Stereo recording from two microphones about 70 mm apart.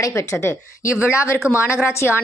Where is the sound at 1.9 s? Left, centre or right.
Left.